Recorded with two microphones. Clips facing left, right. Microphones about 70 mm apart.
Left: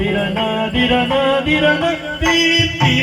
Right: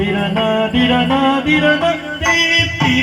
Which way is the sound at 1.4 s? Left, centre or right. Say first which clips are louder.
Right 2 dB; centre.